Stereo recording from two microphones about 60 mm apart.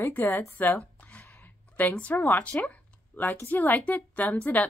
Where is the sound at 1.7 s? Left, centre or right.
Left.